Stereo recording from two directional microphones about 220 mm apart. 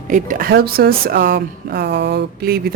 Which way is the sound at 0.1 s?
40° right (ahead or behind).